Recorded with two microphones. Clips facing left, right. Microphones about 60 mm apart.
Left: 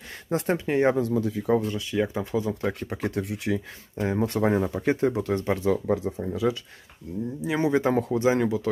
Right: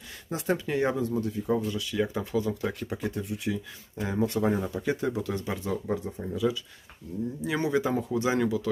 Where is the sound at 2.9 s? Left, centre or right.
Left.